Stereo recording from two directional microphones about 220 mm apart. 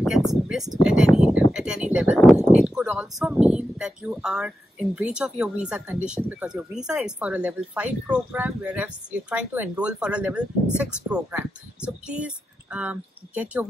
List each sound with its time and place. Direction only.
0.3 s speech: centre (ahead or behind)